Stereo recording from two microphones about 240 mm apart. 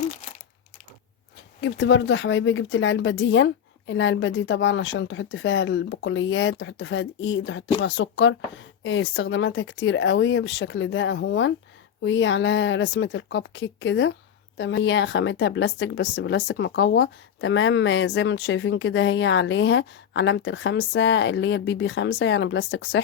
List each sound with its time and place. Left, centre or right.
1.6 s speech: left